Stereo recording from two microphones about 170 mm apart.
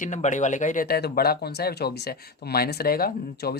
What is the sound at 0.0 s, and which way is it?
Speech, 45° left (ahead or behind).